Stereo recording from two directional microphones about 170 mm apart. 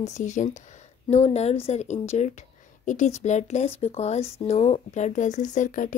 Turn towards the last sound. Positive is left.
turn(degrees=50)  # may be behind; listen again after turning